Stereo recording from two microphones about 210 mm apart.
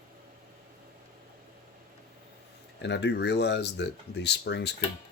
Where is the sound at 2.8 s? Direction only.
55° left (ahead or behind).